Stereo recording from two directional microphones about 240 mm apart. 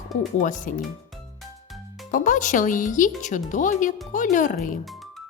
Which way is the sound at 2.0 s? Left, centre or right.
Left.